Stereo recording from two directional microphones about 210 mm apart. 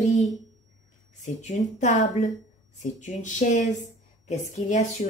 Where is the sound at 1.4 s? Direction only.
35° left (ahead or behind).